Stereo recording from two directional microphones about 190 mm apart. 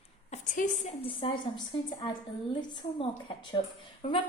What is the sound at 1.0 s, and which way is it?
Speech, 25° left (ahead or behind).